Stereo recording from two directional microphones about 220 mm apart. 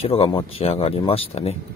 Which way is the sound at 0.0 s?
25° left (ahead or behind).